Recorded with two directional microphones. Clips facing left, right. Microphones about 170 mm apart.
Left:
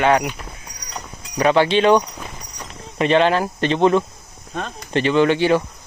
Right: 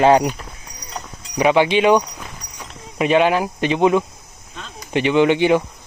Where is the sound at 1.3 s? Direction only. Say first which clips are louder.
Right 1 dB; 15° right (ahead or behind).